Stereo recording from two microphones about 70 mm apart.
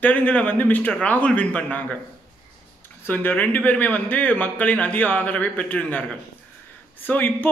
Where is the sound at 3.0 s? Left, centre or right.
Left.